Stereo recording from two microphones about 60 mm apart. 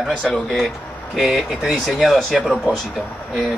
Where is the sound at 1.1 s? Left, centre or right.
Centre.